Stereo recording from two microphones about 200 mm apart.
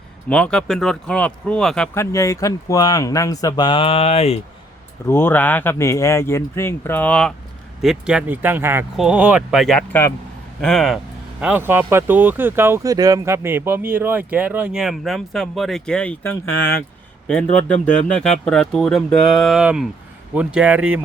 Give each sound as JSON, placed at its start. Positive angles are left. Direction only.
{"t": 0.3, "sound": "speech", "side_deg": 5}
{"t": 2.0, "sound": "speech", "side_deg": 15}
{"t": 5.0, "sound": "speech", "side_deg": 10}
{"t": 17.4, "sound": "speech", "side_deg": 40}
{"t": 18.1, "sound": "speech", "side_deg": 5}